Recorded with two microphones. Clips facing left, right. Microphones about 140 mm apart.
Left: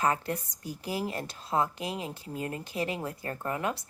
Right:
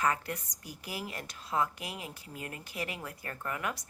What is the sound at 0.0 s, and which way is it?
A woman's voice, 30° left (ahead or behind).